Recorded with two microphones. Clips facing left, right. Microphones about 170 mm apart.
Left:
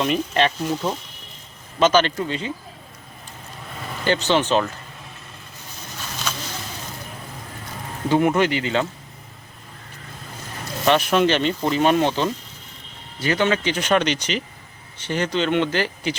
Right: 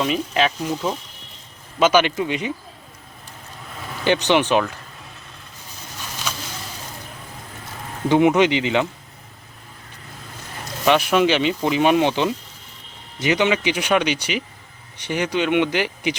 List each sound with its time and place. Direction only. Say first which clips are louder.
0.0 s speech: even; centre (ahead or behind)
1.8 s speech: right 1 dB; 10° right (ahead or behind)
4.0 s speech: right 2 dB; 15° right (ahead or behind)
6.3 s a sound: even; 10° right (ahead or behind)
8.4 s speech: right 3 dB; 20° right (ahead or behind)
10.8 s speech: right 1 dB; 5° right (ahead or behind)